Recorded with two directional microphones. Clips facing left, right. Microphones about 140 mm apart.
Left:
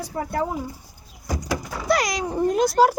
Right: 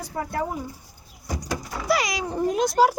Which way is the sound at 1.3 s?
90° left.